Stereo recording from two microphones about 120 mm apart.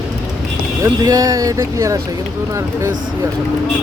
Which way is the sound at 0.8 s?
30° right (ahead or behind).